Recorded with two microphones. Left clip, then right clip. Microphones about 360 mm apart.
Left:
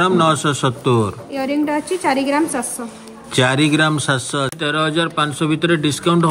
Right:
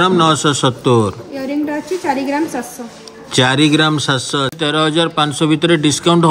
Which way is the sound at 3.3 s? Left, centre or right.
Centre.